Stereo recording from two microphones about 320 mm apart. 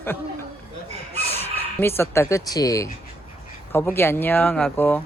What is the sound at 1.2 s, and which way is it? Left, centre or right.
Speech, centre.